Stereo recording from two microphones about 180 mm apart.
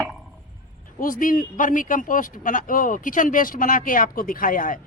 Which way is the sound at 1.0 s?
50° left (ahead or behind).